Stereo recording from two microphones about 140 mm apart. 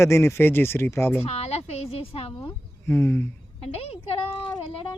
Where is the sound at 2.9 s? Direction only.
15° left (ahead or behind).